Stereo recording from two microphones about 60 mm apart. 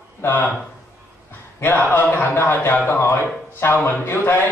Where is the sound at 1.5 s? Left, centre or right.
Left.